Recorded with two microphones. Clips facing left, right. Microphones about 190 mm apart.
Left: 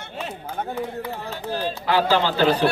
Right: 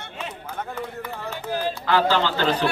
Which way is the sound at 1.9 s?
15° left (ahead or behind).